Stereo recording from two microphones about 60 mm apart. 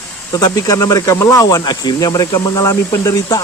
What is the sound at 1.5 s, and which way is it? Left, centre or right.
Speech, left.